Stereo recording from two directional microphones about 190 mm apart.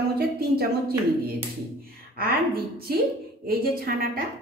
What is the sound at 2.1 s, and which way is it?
A woman's voice, 55° right (ahead or behind).